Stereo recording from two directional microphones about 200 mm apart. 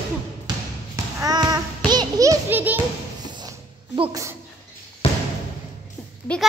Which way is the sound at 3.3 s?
20° right (ahead or behind).